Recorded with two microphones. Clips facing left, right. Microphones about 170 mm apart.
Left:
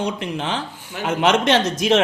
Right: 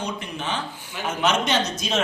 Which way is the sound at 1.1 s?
90° left.